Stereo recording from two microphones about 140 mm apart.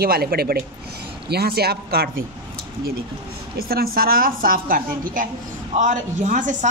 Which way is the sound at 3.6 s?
90° right.